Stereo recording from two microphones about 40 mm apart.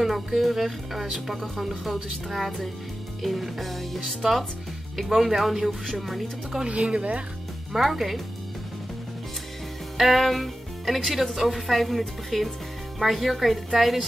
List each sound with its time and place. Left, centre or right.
0.0 s speech: centre
6.6 s speech: right
7.7 s speech: centre
9.9 s speech: centre
11.3 s speech: centre